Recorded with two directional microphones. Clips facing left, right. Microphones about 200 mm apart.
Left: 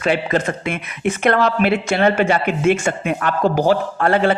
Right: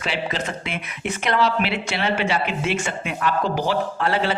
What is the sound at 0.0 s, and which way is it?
A man's voice, 50° left (ahead or behind).